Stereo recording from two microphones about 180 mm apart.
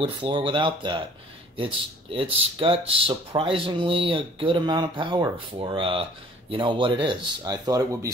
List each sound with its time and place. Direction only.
0.0 s speech: 30° right (ahead or behind)